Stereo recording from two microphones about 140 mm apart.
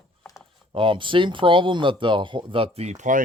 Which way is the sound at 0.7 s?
35° right (ahead or behind).